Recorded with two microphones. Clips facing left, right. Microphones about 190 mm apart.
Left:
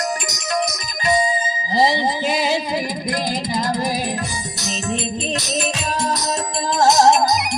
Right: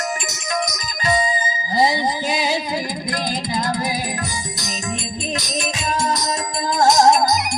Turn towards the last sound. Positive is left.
turn(degrees=30)  # may be behind; listen again after turning